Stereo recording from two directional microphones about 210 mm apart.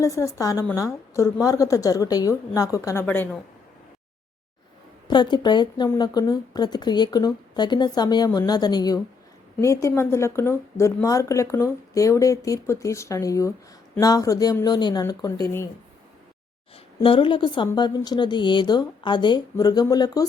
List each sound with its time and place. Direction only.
0.0 s speech: 15° left (ahead or behind)
5.0 s speech: 20° left (ahead or behind)
16.7 s speech: 25° left (ahead or behind)